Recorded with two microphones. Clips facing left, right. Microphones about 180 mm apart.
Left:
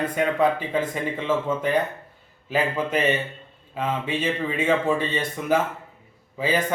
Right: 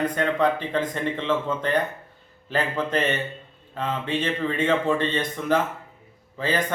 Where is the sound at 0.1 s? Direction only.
10° left (ahead or behind).